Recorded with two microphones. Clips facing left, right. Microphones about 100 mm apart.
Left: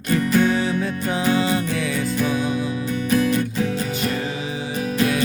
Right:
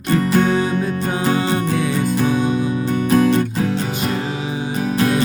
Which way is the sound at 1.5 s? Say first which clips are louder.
Right 3 dB; 30° right (ahead or behind).